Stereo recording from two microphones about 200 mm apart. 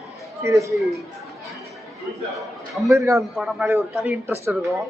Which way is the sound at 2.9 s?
15° right (ahead or behind).